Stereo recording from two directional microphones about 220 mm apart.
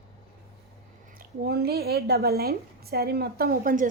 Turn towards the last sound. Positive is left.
turn(degrees=-40)  # may be behind; listen again after turning